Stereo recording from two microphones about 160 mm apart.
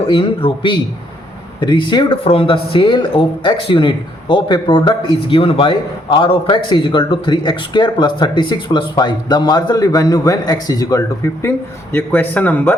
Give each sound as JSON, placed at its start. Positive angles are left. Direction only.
{"t": 0.1, "sound": "a man's voice", "side_deg": 30}